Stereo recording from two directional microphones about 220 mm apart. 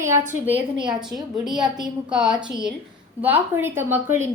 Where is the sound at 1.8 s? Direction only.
5° right (ahead or behind).